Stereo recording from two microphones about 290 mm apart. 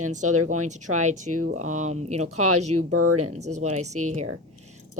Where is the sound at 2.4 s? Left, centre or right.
Right.